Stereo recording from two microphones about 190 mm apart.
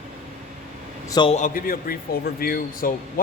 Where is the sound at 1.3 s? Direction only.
45° left (ahead or behind).